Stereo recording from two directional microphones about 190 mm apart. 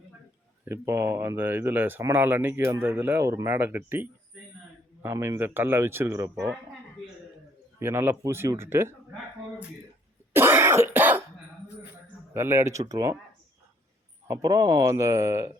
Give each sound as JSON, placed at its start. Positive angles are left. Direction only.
{"t": 0.6, "sound": "speech", "side_deg": -10}
{"t": 7.8, "sound": "speech", "side_deg": -15}
{"t": 10.3, "sound": "throat clearing", "side_deg": -10}
{"t": 12.3, "sound": "speech", "side_deg": -15}
{"t": 14.3, "sound": "speech", "side_deg": -20}